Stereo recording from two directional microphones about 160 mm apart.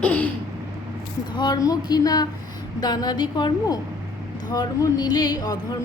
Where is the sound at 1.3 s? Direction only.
25° left (ahead or behind).